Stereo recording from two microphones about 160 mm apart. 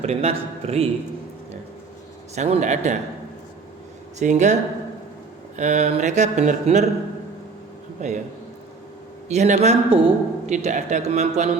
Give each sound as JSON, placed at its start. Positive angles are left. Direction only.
{"t": 0.0, "sound": "a man's voice", "side_deg": -40}
{"t": 2.3, "sound": "speech", "side_deg": -45}
{"t": 4.2, "sound": "speech", "side_deg": -50}
{"t": 8.0, "sound": "speech", "side_deg": -45}
{"t": 9.3, "sound": "speech", "side_deg": -45}
{"t": 10.5, "sound": "speech", "side_deg": -50}